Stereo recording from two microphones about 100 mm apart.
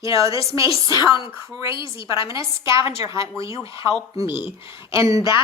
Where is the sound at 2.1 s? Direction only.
30° right (ahead or behind).